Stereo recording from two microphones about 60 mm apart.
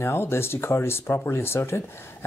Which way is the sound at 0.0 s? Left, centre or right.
Left.